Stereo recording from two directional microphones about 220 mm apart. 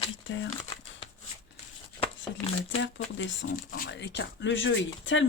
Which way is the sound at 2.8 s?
55° left (ahead or behind).